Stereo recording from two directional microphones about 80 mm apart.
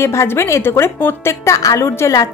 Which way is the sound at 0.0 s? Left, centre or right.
Left.